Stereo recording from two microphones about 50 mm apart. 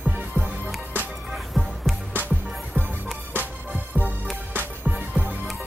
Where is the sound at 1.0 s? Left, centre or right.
Right.